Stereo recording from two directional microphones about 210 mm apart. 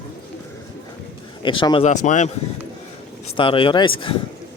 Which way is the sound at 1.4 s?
25° left (ahead or behind).